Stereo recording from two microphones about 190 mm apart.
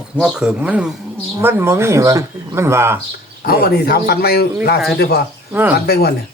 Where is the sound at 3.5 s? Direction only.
55° left (ahead or behind).